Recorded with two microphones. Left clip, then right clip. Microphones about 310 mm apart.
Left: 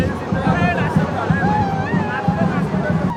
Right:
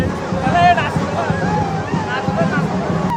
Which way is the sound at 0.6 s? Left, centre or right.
Right.